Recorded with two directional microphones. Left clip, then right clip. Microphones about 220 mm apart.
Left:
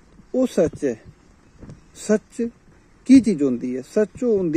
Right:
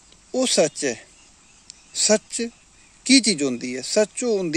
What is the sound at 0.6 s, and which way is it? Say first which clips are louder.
Speech: left 1 dB; 25° right (ahead or behind).